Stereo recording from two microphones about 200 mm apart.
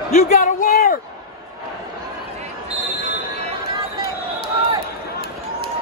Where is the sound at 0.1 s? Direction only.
40° left (ahead or behind).